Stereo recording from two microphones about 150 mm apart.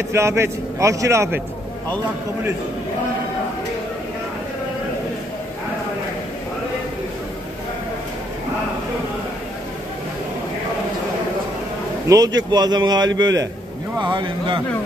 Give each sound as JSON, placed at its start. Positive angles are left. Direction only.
{"t": 0.1, "sound": "a man's voice", "side_deg": -15}
{"t": 12.1, "sound": "a man's voice", "side_deg": -25}